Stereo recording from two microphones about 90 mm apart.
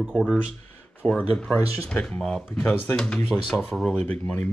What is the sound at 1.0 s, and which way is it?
Speech, 10° left (ahead or behind).